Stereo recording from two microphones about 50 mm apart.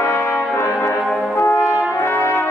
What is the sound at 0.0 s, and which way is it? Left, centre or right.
Brass instrument, left.